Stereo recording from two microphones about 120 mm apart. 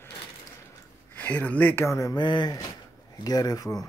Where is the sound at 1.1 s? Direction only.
15° left (ahead or behind).